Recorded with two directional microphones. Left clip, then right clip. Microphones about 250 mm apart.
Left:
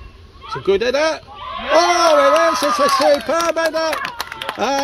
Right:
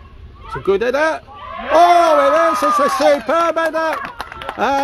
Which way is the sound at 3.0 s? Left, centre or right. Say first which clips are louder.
Right 2 dB; centre.